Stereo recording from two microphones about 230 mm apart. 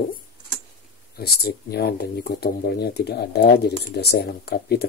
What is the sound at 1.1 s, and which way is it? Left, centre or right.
Speech, left.